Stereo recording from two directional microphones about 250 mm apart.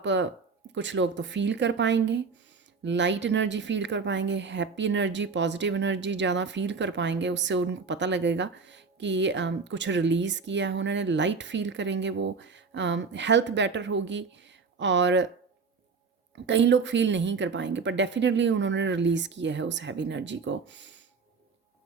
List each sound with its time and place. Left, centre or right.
0.0 s a woman's voice: right
16.3 s a woman's voice: right